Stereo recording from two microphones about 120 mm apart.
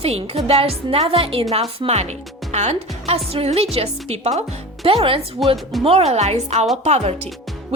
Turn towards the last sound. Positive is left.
turn(degrees=-60)  # may be behind; listen again after turning